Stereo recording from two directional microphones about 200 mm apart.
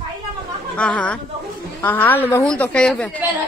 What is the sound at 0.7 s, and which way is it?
A woman's voice, 5° left (ahead or behind).